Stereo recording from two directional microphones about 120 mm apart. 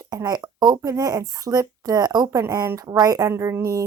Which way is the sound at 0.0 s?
30° right (ahead or behind).